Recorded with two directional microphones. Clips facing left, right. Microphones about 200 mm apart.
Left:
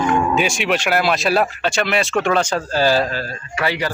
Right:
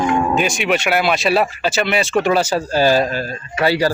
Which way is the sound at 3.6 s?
35° right (ahead or behind).